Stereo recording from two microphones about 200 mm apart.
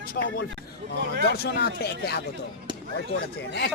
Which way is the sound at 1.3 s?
50° left (ahead or behind).